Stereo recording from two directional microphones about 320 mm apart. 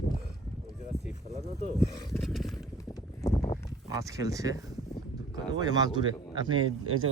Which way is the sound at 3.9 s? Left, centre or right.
Centre.